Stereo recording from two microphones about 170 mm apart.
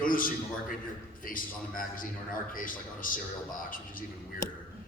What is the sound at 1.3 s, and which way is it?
A man's voice, 55° left (ahead or behind).